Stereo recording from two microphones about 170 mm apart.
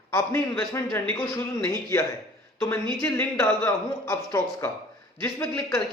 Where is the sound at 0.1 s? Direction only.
15° left (ahead or behind).